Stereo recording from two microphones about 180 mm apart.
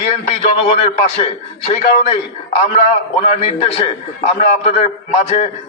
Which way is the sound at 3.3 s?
35° left (ahead or behind).